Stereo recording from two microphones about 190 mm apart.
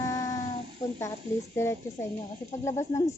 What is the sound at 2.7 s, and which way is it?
Speech, 15° left (ahead or behind).